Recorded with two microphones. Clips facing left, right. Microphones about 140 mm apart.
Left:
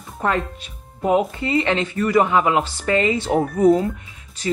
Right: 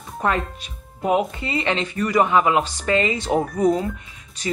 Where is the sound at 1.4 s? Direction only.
20° right (ahead or behind).